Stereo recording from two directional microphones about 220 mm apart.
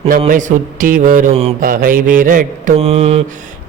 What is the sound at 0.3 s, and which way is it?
Mantra, 35° right (ahead or behind).